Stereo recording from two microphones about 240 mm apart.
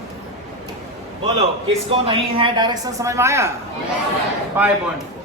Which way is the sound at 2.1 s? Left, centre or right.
Right.